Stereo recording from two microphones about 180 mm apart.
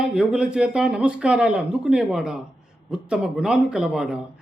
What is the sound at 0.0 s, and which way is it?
A man's voice, 5° right (ahead or behind).